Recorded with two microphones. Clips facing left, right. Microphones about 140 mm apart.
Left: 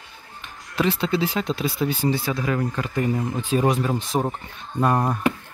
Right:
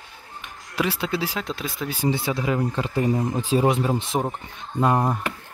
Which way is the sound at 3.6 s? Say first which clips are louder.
Even; 20° right (ahead or behind).